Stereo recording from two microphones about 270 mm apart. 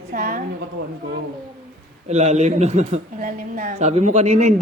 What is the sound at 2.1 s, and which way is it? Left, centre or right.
A woman's voice, right.